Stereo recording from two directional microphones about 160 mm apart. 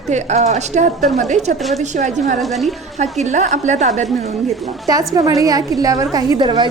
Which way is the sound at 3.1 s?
45° right (ahead or behind).